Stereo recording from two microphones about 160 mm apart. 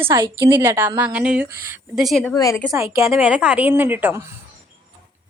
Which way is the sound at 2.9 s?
20° right (ahead or behind).